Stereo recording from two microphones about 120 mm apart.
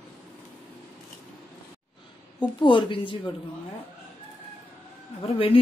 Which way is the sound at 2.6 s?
45° left (ahead or behind).